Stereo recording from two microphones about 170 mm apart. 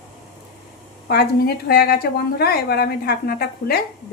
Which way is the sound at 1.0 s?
65° left (ahead or behind).